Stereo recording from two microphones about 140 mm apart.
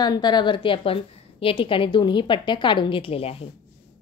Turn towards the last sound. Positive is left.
turn(degrees=45)  # may be behind; listen again after turning